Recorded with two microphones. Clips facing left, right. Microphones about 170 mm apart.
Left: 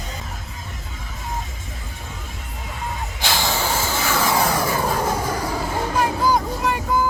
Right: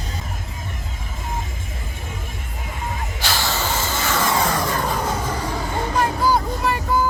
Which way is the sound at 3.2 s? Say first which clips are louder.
Left 2 dB; 15° left (ahead or behind).